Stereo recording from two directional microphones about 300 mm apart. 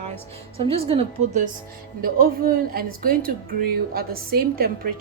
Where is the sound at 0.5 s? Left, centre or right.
Centre.